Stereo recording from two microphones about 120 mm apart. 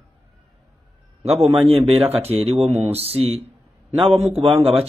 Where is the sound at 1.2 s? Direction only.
60° right (ahead or behind).